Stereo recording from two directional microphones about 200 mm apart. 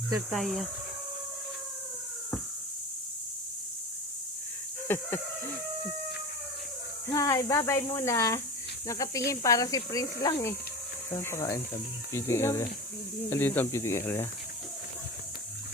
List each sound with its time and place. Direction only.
0.3 s speech: centre (ahead or behind)
4.9 s speech: 10° left (ahead or behind)
7.1 s speech: 15° left (ahead or behind)